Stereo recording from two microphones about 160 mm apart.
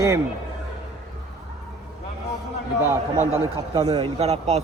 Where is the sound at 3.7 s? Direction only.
35° right (ahead or behind).